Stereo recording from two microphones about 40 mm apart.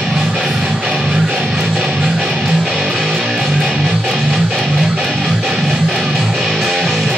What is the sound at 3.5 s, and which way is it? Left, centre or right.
Music, centre.